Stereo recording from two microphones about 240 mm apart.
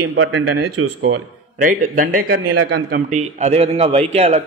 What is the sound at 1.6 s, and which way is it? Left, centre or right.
A man's voice, right.